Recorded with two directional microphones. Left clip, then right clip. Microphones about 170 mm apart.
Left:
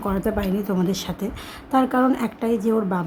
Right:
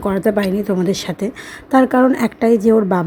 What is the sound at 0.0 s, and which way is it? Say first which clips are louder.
A woman's voice: right 8 dB; 30° right (ahead or behind).